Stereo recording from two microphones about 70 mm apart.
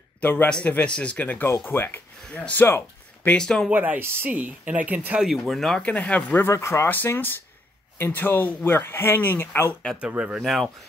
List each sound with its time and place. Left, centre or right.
0.2 s a man's voice: left
0.5 s speech: centre
3.3 s speech: centre
3.7 s speech: right
5.2 s speech: centre
5.8 s speech: centre
6.4 s speech: left
8.0 s speech: left
9.9 s speech: centre
10.4 s speech: centre